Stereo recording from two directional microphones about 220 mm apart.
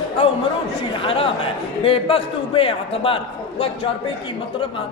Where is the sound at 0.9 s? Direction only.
25° left (ahead or behind).